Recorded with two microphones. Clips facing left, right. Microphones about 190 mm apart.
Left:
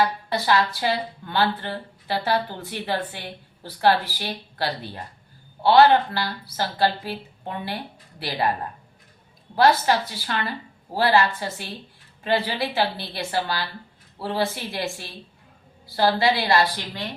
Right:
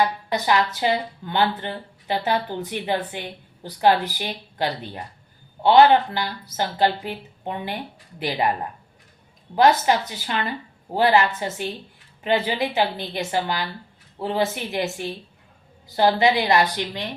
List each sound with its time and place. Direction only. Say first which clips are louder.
0.0 s a woman's voice: right 1 dB; 20° right (ahead or behind)
9.6 s a woman's voice: right 1 dB; 20° right (ahead or behind)